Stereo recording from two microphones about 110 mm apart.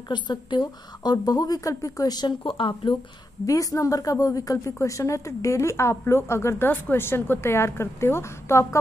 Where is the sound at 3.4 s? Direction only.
30° left (ahead or behind).